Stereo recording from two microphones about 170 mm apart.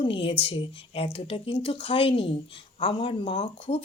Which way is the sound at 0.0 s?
30° left (ahead or behind).